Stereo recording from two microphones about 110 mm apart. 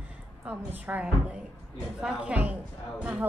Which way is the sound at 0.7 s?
15° right (ahead or behind).